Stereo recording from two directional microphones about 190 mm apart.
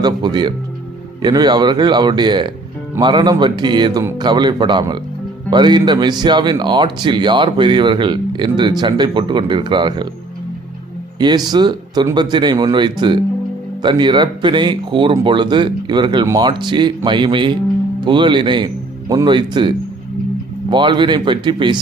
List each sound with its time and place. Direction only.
0.0 s speech: 20° right (ahead or behind)
11.2 s speech: 20° right (ahead or behind)